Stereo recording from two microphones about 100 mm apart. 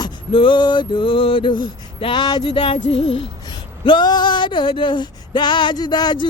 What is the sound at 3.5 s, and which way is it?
Speech, 50° left (ahead or behind).